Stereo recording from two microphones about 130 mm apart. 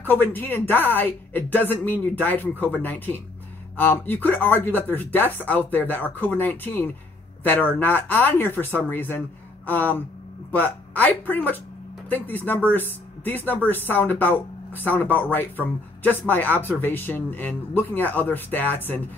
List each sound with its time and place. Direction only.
0.0 s speech: 15° left (ahead or behind)